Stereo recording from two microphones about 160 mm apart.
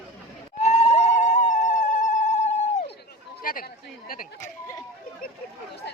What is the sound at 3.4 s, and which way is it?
Chatter, 60° left (ahead or behind).